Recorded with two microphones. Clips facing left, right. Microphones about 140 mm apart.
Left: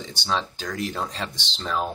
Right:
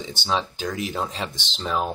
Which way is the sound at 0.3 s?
10° right (ahead or behind).